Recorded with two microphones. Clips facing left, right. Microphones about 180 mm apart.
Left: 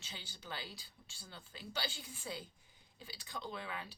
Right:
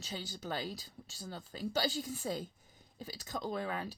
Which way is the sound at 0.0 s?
40° right (ahead or behind).